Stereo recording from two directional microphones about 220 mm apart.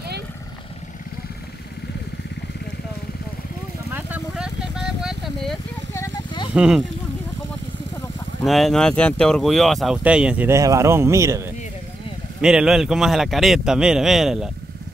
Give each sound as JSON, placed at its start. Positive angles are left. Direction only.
{"t": 3.9, "sound": "vehicle", "side_deg": -5}
{"t": 5.9, "sound": "a sound", "side_deg": 20}
{"t": 6.5, "sound": "speech", "side_deg": -5}
{"t": 8.5, "sound": "speech", "side_deg": 0}